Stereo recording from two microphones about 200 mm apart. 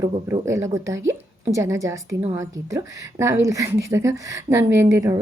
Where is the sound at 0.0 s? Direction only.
15° right (ahead or behind).